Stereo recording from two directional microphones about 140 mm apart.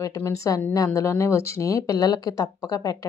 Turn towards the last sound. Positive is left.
turn(degrees=25)  # may be behind; listen again after turning